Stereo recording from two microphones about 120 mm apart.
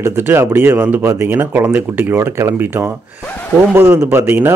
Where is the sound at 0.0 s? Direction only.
20° right (ahead or behind).